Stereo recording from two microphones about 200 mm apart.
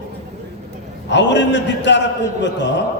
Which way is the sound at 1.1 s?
60° left (ahead or behind).